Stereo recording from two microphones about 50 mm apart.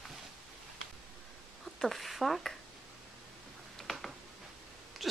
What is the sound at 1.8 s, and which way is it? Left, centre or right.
Speech, centre.